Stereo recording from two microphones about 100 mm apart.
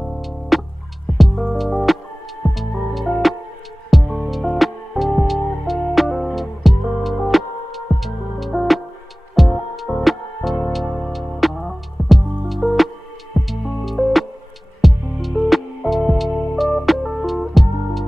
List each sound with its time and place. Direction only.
0.0 s music: centre (ahead or behind)